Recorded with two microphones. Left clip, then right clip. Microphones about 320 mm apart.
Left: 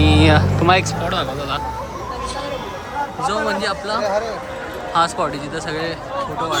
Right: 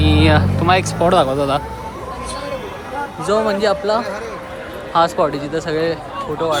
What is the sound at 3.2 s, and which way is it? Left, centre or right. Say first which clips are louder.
Speech: right 5 dB; centre.